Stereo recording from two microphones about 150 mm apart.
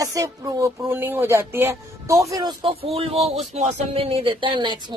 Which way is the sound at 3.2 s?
45° right (ahead or behind).